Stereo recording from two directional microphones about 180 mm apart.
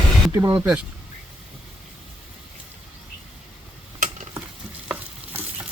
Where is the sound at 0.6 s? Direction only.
5° right (ahead or behind).